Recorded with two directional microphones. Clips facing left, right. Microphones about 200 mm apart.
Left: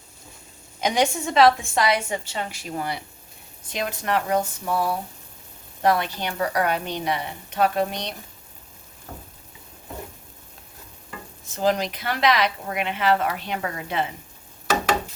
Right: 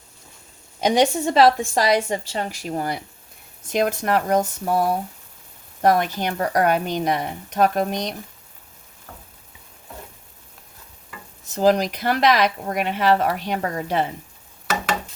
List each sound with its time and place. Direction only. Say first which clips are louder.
0.8 s a woman's voice: right 4 dB; 35° right (ahead or behind)
11.5 s speech: right 5 dB; 40° right (ahead or behind)